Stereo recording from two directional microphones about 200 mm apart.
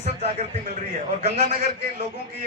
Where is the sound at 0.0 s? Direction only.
30° right (ahead or behind).